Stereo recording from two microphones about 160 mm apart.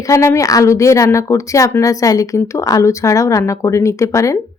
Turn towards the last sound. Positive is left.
turn(degrees=20)  # may be behind; listen again after turning